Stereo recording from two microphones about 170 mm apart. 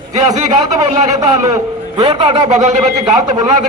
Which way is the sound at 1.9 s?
30° right (ahead or behind).